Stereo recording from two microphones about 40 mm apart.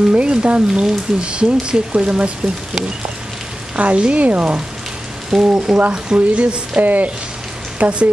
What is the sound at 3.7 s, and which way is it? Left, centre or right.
Speech, right.